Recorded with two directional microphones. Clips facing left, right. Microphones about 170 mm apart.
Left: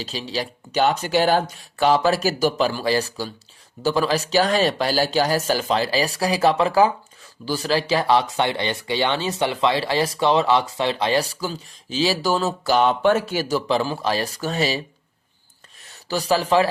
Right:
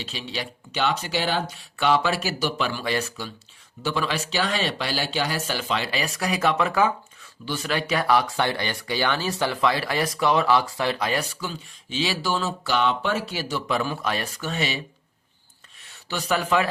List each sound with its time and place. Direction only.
0.0 s speech: 35° left (ahead or behind)
13.7 s speech: 30° left (ahead or behind)
16.0 s speech: 35° left (ahead or behind)